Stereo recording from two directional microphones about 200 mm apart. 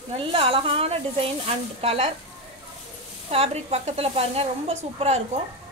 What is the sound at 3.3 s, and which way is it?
A woman's voice, 30° right (ahead or behind).